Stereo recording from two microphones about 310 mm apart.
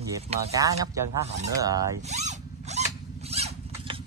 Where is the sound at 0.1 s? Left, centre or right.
Centre.